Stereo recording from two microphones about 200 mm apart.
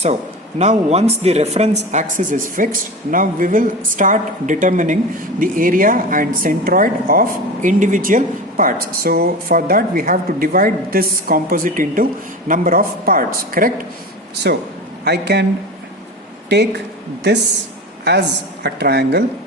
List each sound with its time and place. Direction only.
0.6 s a woman's voice: 35° right (ahead or behind)
14.5 s a woman's voice: 55° right (ahead or behind)
18.0 s a woman's voice: 55° right (ahead or behind)